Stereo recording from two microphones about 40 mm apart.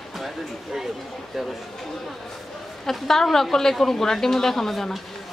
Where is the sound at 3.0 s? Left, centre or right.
Centre.